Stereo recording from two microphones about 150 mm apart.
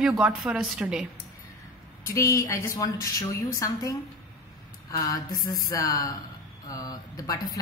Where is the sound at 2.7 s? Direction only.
20° left (ahead or behind).